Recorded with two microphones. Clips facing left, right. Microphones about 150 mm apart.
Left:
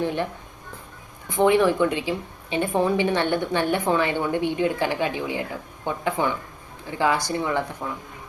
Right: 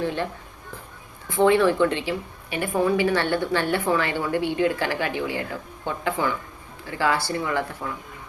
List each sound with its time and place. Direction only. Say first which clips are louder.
0.0 s speech: left 1 dB; 15° left (ahead or behind)
1.3 s speech: even; 15° left (ahead or behind)